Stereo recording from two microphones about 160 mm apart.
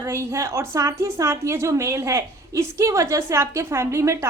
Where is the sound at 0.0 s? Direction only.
15° right (ahead or behind).